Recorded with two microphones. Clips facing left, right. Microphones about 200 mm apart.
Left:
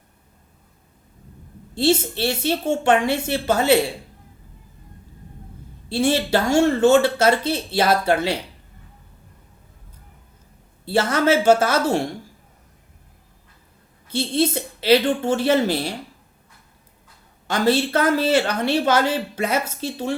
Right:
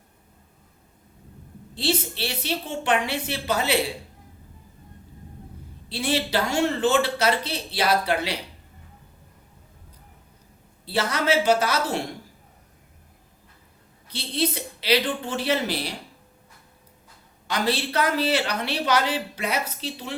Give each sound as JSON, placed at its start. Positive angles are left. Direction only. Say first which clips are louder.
{"t": 1.8, "sound": "speech", "louder": "left 7 dB", "side_deg": 50}
{"t": 5.9, "sound": "speech", "louder": "left 6 dB", "side_deg": 50}
{"t": 10.8, "sound": "speech", "louder": "left 5 dB", "side_deg": 50}
{"t": 14.1, "sound": "speech", "louder": "left 6 dB", "side_deg": 50}
{"t": 17.5, "sound": "speech", "louder": "left 6 dB", "side_deg": 50}